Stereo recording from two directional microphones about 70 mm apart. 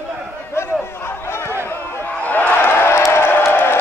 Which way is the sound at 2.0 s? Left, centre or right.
Left.